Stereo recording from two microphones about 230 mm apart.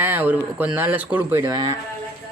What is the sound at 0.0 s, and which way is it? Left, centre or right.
Speech, centre.